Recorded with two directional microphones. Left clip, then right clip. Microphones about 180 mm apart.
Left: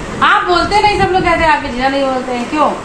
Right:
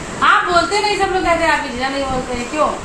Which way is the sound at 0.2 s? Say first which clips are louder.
Left 2 dB; 55° left (ahead or behind).